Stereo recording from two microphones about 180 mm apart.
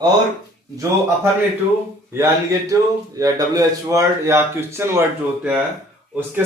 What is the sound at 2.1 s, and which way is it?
Speech, 15° right (ahead or behind).